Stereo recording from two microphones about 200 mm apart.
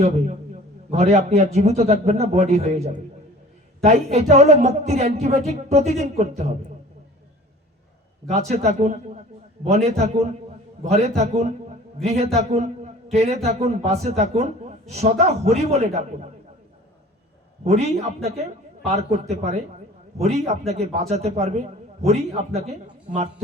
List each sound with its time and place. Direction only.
0.9 s a man's voice: 30° right (ahead or behind)
8.3 s a man's voice: 35° right (ahead or behind)
17.6 s a man's voice: 35° right (ahead or behind)